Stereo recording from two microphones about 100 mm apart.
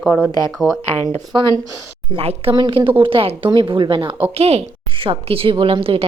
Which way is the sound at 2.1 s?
70° right (ahead or behind).